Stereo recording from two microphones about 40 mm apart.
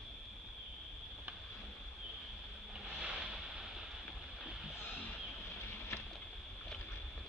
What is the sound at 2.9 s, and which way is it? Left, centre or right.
Boat, centre.